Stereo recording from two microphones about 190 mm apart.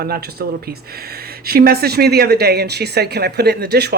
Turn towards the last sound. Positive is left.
turn(degrees=-60)  # may be behind; listen again after turning